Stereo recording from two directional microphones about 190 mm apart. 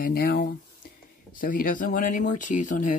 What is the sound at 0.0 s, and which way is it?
Speech, 55° left (ahead or behind).